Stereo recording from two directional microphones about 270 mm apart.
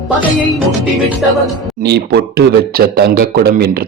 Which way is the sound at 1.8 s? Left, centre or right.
Right.